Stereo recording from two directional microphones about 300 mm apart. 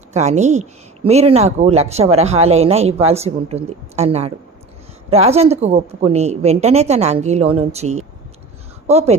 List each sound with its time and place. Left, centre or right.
0.1 s speech: right